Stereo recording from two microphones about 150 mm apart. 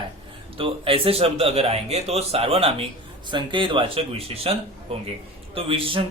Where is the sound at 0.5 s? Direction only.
40° right (ahead or behind).